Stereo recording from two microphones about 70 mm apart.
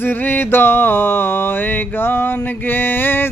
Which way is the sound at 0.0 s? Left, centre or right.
Left.